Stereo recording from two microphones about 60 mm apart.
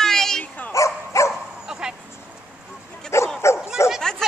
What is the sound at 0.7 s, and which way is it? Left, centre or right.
Dog, left.